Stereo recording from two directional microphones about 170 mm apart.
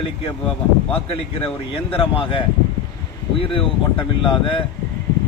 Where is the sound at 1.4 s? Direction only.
35° left (ahead or behind).